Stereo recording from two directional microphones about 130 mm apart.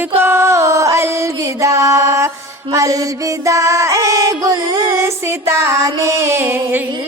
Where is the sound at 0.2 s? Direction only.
20° right (ahead or behind).